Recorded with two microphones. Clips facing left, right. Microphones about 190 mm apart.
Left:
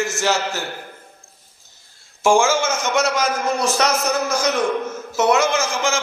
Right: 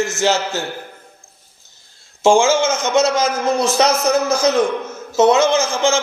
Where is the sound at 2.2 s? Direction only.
20° right (ahead or behind).